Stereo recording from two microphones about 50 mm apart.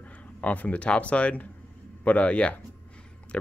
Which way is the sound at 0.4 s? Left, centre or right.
Left.